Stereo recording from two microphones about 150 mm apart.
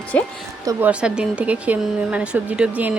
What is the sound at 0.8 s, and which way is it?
A woman's voice, 10° right (ahead or behind).